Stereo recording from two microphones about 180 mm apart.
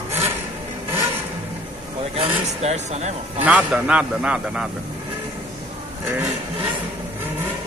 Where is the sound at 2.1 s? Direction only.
35° right (ahead or behind).